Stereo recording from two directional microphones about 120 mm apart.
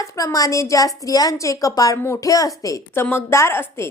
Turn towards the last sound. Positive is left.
turn(degrees=20)  # may be behind; listen again after turning